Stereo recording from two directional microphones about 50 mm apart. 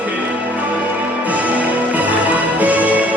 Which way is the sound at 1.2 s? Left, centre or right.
Right.